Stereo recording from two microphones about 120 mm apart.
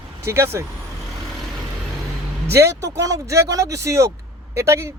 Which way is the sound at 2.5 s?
25° right (ahead or behind).